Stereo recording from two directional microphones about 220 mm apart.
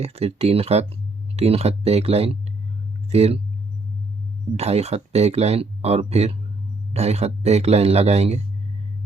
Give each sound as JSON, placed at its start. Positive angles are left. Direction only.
{"t": 0.0, "sound": "speech", "side_deg": -30}
{"t": 4.5, "sound": "speech", "side_deg": -30}